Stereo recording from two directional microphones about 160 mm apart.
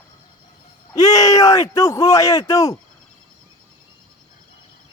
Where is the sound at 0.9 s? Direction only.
20° left (ahead or behind).